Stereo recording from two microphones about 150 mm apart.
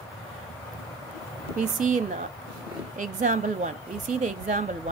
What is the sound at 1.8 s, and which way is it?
Speech, 55° right (ahead or behind).